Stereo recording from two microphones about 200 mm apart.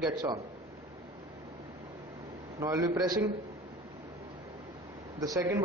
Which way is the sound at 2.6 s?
15° right (ahead or behind).